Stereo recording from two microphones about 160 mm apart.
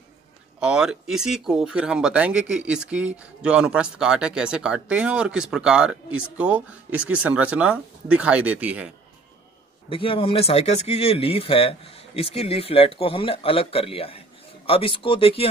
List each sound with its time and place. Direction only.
0.6 s speech: 5° right (ahead or behind)
9.8 s speech: 35° left (ahead or behind)